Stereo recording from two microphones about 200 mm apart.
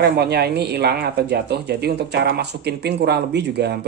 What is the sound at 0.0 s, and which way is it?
Speech, 55° right (ahead or behind).